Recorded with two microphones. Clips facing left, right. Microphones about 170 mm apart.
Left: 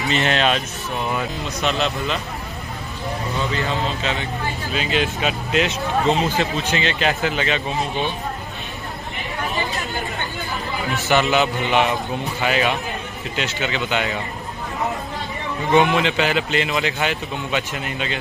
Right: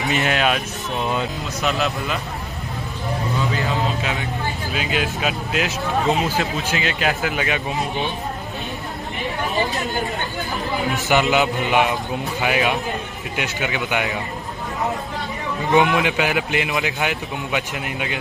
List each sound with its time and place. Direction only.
0.0 s speech: 10° right (ahead or behind)
0.9 s speech: 20° right (ahead or behind)
1.6 s speech: 5° right (ahead or behind)
3.5 s speech: 10° right (ahead or behind)
11.1 s speech: 15° right (ahead or behind)
15.7 s speech: 15° right (ahead or behind)